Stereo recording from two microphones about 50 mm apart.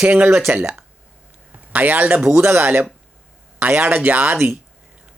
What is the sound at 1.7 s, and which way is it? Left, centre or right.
Speech, right.